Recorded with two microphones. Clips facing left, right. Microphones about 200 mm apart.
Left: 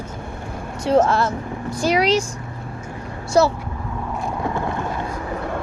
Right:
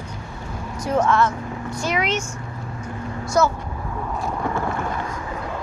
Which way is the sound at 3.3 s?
30° left (ahead or behind).